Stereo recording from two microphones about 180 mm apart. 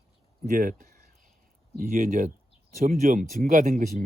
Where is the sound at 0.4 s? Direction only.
45° right (ahead or behind).